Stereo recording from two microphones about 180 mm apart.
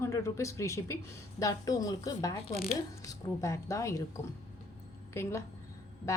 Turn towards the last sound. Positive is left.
turn(degrees=15)  # may be behind; listen again after turning